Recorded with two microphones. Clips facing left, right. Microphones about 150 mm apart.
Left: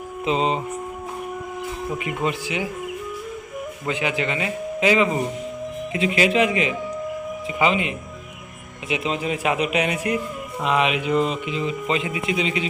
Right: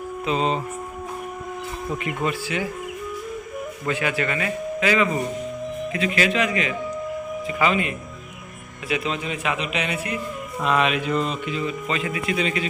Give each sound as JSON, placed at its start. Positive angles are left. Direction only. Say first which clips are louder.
{"t": 0.3, "sound": "speech", "louder": "left 1 dB", "side_deg": 20}
{"t": 2.0, "sound": "speech", "louder": "even", "side_deg": 15}
{"t": 3.8, "sound": "a man's voice", "louder": "even", "side_deg": 15}
{"t": 9.6, "sound": "speech", "louder": "left 4 dB", "side_deg": 15}